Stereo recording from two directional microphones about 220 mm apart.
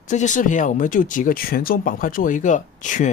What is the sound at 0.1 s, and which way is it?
Speech, 35° left (ahead or behind).